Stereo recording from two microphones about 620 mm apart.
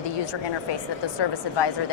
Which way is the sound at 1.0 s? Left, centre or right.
Left.